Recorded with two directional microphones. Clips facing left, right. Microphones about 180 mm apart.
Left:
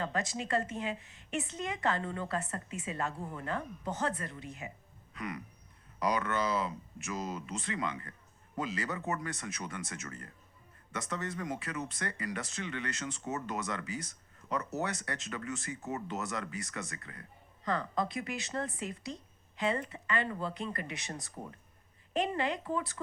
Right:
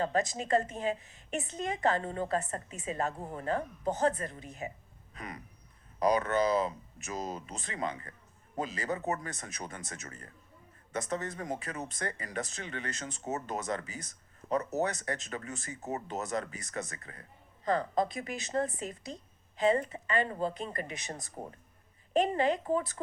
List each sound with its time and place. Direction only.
0.0 s speech: 40° right (ahead or behind)
6.0 s speech: 40° right (ahead or behind)
17.9 s speech: 45° right (ahead or behind)
19.5 s speech: 40° right (ahead or behind)
21.1 s speech: 30° right (ahead or behind)
22.4 s speech: 45° right (ahead or behind)